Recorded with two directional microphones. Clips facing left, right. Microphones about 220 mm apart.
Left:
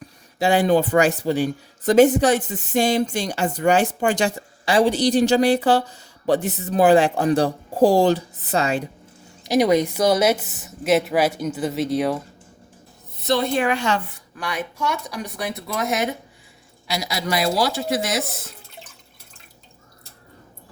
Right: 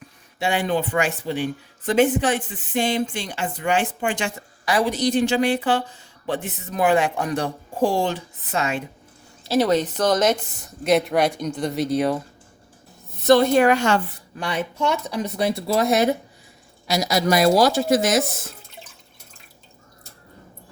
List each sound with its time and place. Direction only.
0.3 s speech: 35° left (ahead or behind)
9.4 s a woman's voice: 15° left (ahead or behind)
13.2 s a woman's voice: 45° right (ahead or behind)
14.3 s a woman's voice: 30° right (ahead or behind); by 18.2 s 45° right (ahead or behind)